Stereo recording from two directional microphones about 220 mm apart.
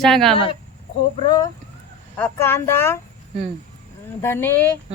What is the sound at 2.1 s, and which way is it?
Speech, 10° left (ahead or behind).